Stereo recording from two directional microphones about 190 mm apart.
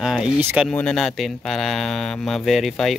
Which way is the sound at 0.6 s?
Centre (ahead or behind).